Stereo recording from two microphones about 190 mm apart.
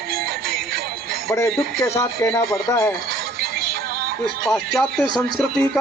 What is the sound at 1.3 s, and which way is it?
Speech, 15° left (ahead or behind).